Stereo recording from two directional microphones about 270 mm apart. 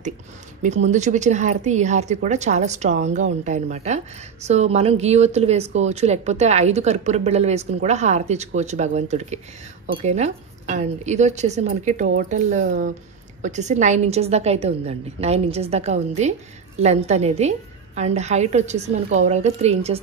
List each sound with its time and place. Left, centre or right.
0.8 s a woman's voice: right